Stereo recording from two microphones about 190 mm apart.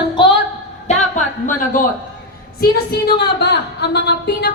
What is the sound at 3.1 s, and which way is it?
A woman's voice, 60° left (ahead or behind).